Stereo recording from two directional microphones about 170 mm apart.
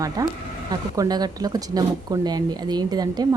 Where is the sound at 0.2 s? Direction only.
20° right (ahead or behind).